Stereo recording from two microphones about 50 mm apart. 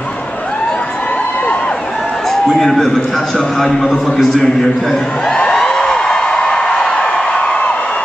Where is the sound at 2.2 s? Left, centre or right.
Centre.